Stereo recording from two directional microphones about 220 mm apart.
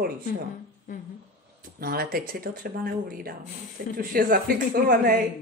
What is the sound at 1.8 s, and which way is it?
Speech, 40° right (ahead or behind).